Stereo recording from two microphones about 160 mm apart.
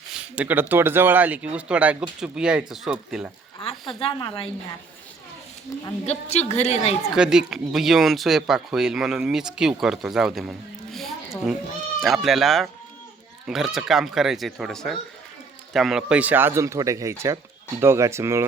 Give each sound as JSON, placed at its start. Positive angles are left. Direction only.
{"t": 0.1, "sound": "speech", "side_deg": -5}
{"t": 4.0, "sound": "a woman's voice", "side_deg": 35}
{"t": 6.1, "sound": "a woman's voice", "side_deg": 45}
{"t": 7.1, "sound": "speech", "side_deg": -5}
{"t": 10.9, "sound": "a sound", "side_deg": 0}
{"t": 11.9, "sound": "speech", "side_deg": 0}